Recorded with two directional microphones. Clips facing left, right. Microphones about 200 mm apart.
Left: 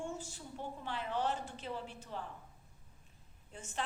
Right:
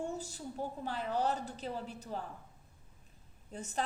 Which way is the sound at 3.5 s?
40° right (ahead or behind).